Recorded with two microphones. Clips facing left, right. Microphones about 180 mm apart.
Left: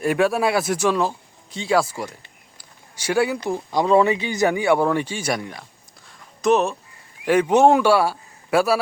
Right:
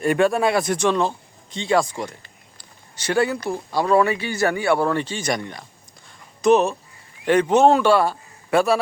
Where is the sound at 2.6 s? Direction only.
10° left (ahead or behind).